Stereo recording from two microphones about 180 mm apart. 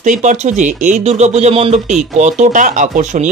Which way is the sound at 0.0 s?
45° right (ahead or behind).